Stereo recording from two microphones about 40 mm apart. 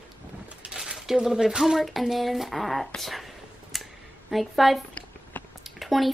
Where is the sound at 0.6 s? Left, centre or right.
Right.